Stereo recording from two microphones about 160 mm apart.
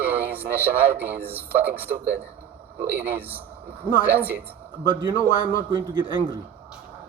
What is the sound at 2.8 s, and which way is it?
Speech, 10° right (ahead or behind).